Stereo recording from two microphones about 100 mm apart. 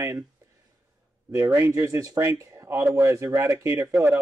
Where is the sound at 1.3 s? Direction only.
30° right (ahead or behind).